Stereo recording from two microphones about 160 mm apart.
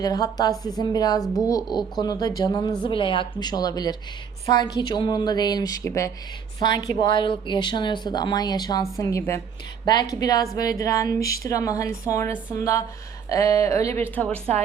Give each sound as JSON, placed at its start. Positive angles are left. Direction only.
{"t": 0.0, "sound": "speech", "side_deg": 25}